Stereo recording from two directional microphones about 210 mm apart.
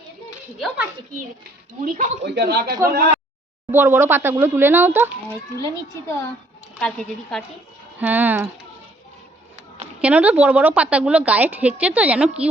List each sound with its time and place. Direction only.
1.8 s speech: 40° right (ahead or behind)
2.2 s speech: 55° right (ahead or behind)
2.6 s a woman's voice: 20° right (ahead or behind)
5.6 s a child's voice: 15° left (ahead or behind)
7.9 s a woman's voice: 10° right (ahead or behind)
10.0 s a woman's voice: 5° right (ahead or behind)